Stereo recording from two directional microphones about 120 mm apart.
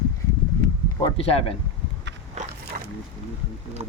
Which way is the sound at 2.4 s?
75° right (ahead or behind).